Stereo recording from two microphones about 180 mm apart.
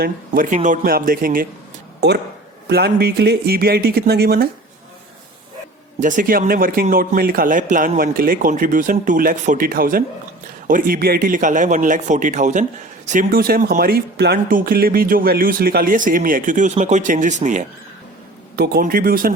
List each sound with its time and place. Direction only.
0.0 s speech: 50° right (ahead or behind)
2.0 s speech: 70° right (ahead or behind)
6.0 s speech: 45° right (ahead or behind)
18.5 s speech: 60° right (ahead or behind)